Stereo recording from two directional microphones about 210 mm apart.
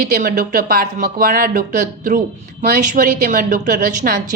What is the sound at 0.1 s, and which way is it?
A woman's voice, 40° right (ahead or behind).